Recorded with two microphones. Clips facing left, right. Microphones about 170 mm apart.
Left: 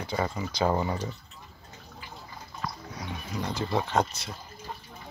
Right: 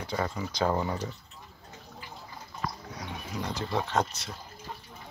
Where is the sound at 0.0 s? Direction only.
5° left (ahead or behind).